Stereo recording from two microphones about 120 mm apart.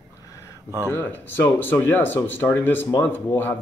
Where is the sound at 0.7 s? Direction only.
20° right (ahead or behind).